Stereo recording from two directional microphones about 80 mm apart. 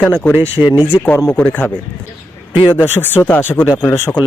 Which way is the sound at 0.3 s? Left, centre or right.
Right.